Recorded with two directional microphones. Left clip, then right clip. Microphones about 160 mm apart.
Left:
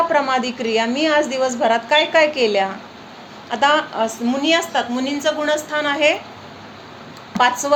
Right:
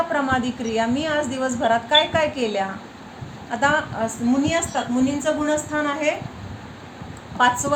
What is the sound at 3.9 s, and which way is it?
A woman's voice, 40° left (ahead or behind).